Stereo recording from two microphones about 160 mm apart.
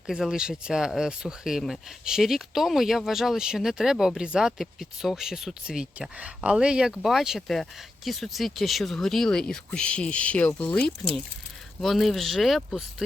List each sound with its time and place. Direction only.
0.1 s speech: 5° right (ahead or behind)